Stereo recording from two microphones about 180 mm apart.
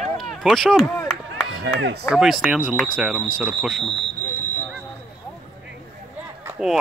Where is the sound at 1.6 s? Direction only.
70° right (ahead or behind).